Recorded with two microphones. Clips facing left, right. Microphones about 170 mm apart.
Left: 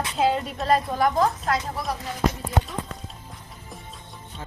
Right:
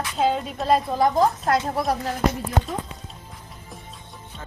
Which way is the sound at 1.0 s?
35° right (ahead or behind).